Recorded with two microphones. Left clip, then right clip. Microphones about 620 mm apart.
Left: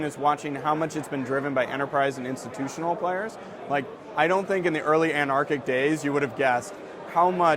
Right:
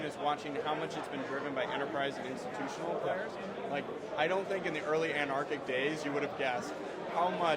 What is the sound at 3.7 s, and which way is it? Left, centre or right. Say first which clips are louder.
A man's voice: left 12 dB; left.